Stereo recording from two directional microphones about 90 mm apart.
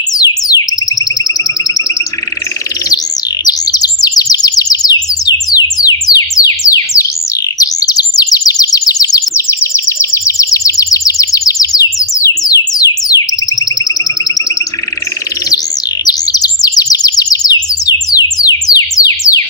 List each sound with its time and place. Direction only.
0.1 s music: 45° left (ahead or behind)
3.4 s chirp: 45° left (ahead or behind)
9.3 s a sound: 30° left (ahead or behind)
16.0 s chirp: 45° left (ahead or behind)
18.9 s music: 40° left (ahead or behind)